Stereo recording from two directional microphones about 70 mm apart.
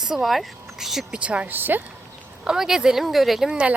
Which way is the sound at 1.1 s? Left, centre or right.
Centre.